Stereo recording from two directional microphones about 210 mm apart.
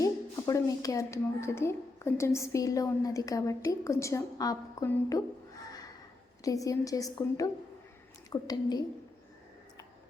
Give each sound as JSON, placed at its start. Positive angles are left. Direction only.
{"t": 0.0, "sound": "a woman's voice", "side_deg": 15}
{"t": 6.4, "sound": "a woman's voice", "side_deg": 15}